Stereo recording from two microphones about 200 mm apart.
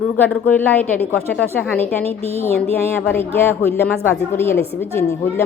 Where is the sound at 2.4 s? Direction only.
10° left (ahead or behind).